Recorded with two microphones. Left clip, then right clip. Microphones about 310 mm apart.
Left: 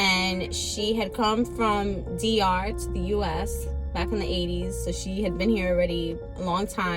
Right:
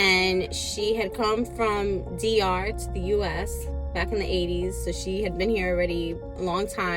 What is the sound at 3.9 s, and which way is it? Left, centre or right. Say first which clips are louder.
A woman's voice: right 2 dB; centre.